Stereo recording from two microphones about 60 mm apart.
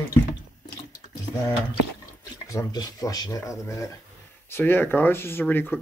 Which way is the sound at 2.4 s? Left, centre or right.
Left.